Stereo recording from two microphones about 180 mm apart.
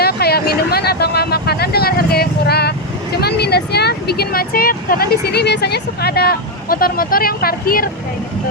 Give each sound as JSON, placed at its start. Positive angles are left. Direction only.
{"t": 0.0, "sound": "vehicle", "side_deg": 60}